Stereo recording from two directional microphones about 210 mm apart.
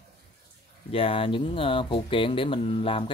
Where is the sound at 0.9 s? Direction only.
25° left (ahead or behind).